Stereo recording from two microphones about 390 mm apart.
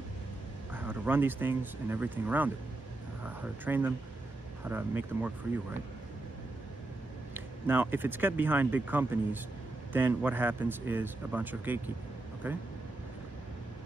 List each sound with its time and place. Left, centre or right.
0.7 s speech: centre
3.6 s speech: centre
7.3 s speech: centre